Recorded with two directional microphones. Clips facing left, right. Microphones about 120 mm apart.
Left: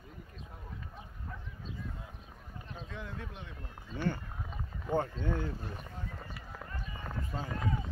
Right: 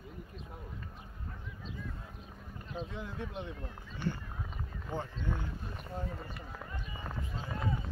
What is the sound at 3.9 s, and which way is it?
Speech, 50° left (ahead or behind).